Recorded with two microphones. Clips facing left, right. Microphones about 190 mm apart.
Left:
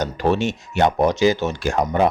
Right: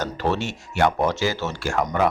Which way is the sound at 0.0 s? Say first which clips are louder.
Left 5 dB; 15° left (ahead or behind).